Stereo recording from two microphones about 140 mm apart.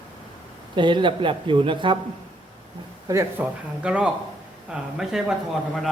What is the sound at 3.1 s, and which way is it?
Speech, 15° right (ahead or behind).